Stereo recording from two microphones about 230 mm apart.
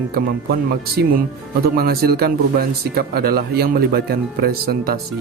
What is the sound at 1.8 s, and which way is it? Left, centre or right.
Speech, right.